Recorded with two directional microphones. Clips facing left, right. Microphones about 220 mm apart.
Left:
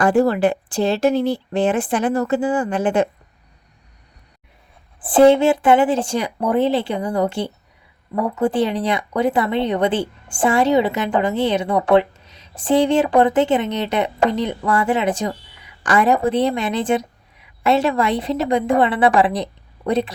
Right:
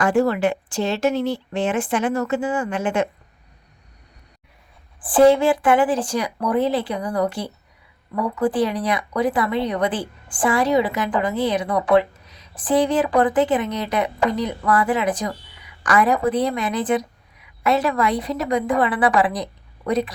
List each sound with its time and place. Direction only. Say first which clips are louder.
0.0 s speech: left 3 dB; 35° left (ahead or behind)
4.9 s speech: left 2 dB; 25° left (ahead or behind)